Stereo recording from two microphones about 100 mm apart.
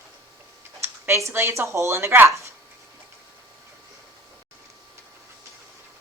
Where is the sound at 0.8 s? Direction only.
30° right (ahead or behind).